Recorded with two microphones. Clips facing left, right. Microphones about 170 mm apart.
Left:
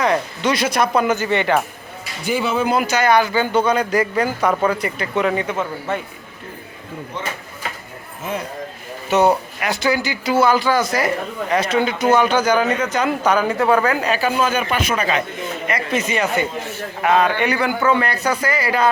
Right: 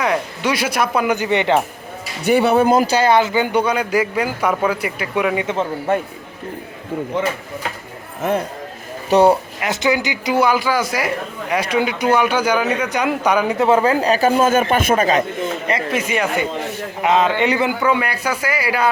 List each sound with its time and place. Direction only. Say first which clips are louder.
0.0 s a man's voice: left 1 dB; 10° right (ahead or behind)
2.2 s speech: right 6 dB; 65° right (ahead or behind)
2.6 s a man's voice: right 3 dB; 35° right (ahead or behind); by 5.5 s 10° right (ahead or behind)
8.2 s speech: right 7 dB; 55° right (ahead or behind)
9.0 s speech: right 3 dB; 35° right (ahead or behind)
9.6 s a man's voice: right 1 dB; 20° right (ahead or behind); by 15.2 s 45° right (ahead or behind)
15.9 s a man's voice: left 2 dB; 10° right (ahead or behind)